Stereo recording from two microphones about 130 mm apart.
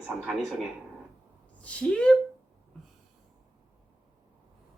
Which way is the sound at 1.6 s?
10° left (ahead or behind).